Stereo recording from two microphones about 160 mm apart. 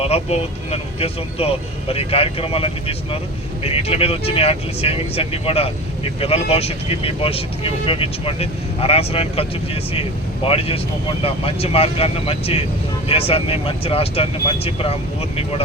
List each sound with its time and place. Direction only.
0.0 s speech: 40° left (ahead or behind)